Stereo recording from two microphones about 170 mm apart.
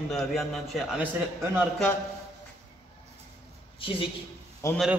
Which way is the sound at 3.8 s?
30° left (ahead or behind).